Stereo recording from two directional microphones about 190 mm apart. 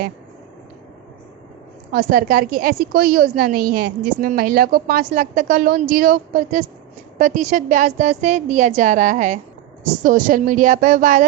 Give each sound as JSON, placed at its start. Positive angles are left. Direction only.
{"t": 1.9, "sound": "a woman's voice", "side_deg": -50}